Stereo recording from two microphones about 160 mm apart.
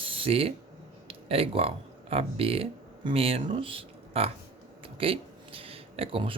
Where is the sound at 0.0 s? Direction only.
35° right (ahead or behind).